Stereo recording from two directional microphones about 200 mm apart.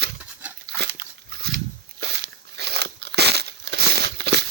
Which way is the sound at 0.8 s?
55° right (ahead or behind).